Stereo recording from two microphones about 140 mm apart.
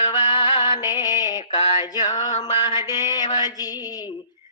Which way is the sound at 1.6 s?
45° left (ahead or behind).